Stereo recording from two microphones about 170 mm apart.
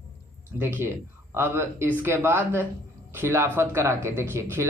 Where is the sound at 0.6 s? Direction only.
15° right (ahead or behind).